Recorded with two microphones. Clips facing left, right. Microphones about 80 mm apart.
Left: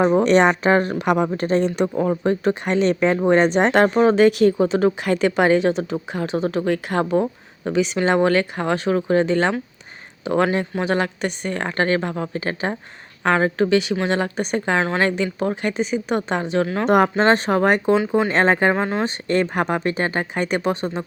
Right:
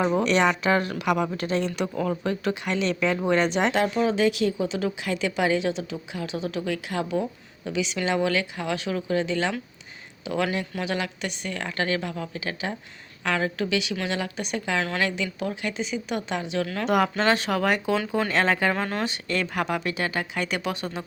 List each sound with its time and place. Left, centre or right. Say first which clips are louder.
0.0 s a woman's voice: left 6 dB; left
19.0 s a woman's voice: left 7 dB; left